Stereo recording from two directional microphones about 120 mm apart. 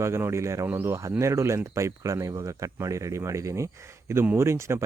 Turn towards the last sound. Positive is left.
turn(degrees=-20)  # may be behind; listen again after turning